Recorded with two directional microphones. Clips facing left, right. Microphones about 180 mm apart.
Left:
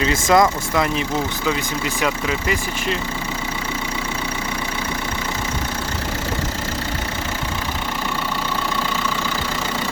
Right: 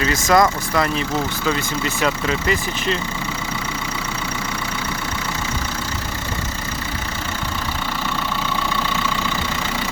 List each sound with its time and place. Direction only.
0.0 s speech: 25° left (ahead or behind)
2.0 s speech: 10° left (ahead or behind)